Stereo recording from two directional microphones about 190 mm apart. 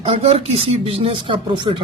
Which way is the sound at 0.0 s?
30° right (ahead or behind).